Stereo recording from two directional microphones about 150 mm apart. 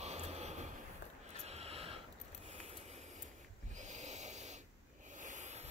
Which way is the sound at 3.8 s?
50° right (ahead or behind).